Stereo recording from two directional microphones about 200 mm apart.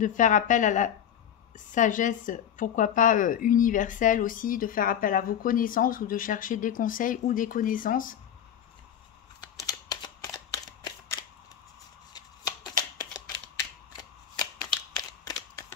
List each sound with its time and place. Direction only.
0.0 s a woman's voice: 40° left (ahead or behind)
9.4 s camera: 20° left (ahead or behind)
12.9 s typewriter: 20° left (ahead or behind)
15.0 s a sound: 20° left (ahead or behind)